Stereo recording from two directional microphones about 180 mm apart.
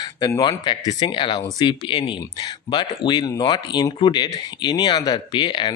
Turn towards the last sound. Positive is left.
turn(degrees=25)  # may be behind; listen again after turning